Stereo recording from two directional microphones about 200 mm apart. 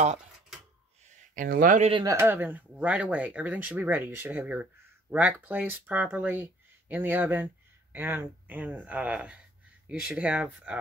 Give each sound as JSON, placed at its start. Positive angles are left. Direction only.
{"t": 0.0, "sound": "speech", "side_deg": -35}
{"t": 1.3, "sound": "speech", "side_deg": -45}
{"t": 1.9, "sound": "speech", "side_deg": -25}
{"t": 2.1, "sound": "speech", "side_deg": -10}